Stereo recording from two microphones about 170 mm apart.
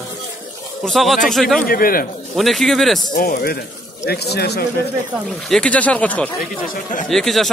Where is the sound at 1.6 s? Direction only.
60° left (ahead or behind).